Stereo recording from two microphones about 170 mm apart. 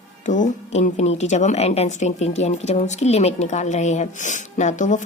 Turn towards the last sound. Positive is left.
turn(degrees=45)  # may be behind; listen again after turning